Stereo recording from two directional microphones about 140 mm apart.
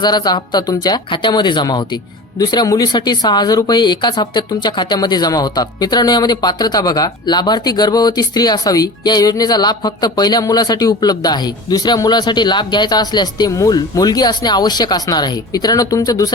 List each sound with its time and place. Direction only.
0.0 s speech: 30° left (ahead or behind)